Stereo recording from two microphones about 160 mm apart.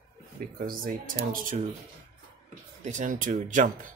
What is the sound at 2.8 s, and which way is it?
Speech, 50° right (ahead or behind).